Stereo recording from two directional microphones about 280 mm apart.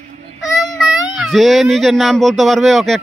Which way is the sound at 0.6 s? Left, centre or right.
Centre.